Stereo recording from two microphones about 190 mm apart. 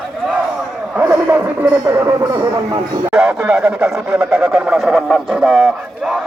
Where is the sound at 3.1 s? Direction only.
5° right (ahead or behind).